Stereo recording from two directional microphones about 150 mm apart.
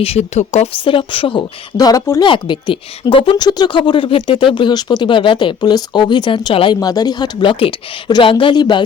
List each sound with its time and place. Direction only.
0.0 s a woman's voice: 45° left (ahead or behind); by 2.2 s 20° left (ahead or behind)
2.2 s a woman's voice: 30° left (ahead or behind)